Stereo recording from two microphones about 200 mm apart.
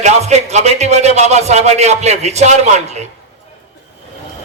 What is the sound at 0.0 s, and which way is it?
A man's voice, 35° right (ahead or behind).